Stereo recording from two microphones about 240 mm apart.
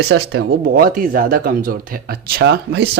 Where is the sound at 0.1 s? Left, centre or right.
Right.